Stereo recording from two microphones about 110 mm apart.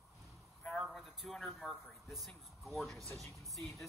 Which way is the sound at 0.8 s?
Centre (ahead or behind).